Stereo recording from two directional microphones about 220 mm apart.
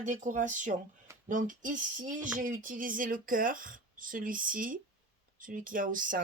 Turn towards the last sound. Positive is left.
turn(degrees=-40)  # may be behind; listen again after turning